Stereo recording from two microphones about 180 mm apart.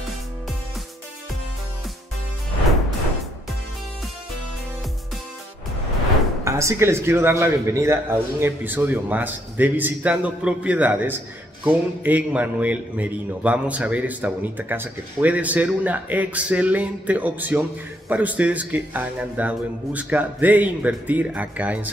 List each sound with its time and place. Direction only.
6.4 s speech: 15° right (ahead or behind)